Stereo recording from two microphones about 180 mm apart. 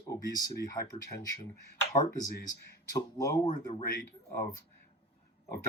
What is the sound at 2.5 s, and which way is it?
Speech, 20° left (ahead or behind).